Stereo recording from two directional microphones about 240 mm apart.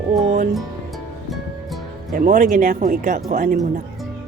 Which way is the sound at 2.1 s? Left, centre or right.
Right.